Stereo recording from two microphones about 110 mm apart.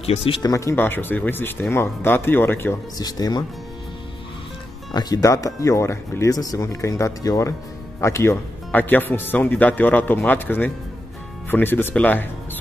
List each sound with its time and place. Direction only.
0.0 s speech: 60° left (ahead or behind)
0.4 s speech: 30° left (ahead or behind)
3.0 s speech: 35° left (ahead or behind)
4.9 s speech: 35° left (ahead or behind); by 12.3 s 15° left (ahead or behind)